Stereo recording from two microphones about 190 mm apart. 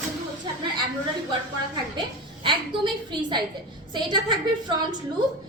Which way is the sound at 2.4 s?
25° right (ahead or behind).